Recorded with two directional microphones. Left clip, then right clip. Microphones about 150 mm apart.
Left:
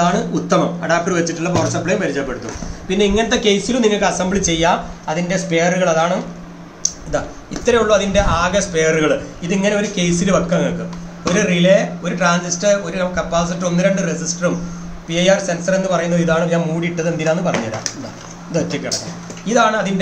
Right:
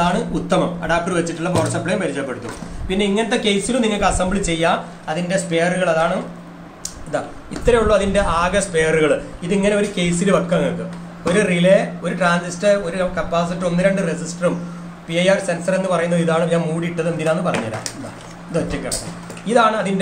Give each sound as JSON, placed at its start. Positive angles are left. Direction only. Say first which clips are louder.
{"t": 0.0, "sound": "a man's voice", "louder": "left 2 dB", "side_deg": -5}
{"t": 7.6, "sound": "a man's voice", "louder": "left 1 dB", "side_deg": 0}
{"t": 19.4, "sound": "a man's voice", "louder": "left 1 dB", "side_deg": 0}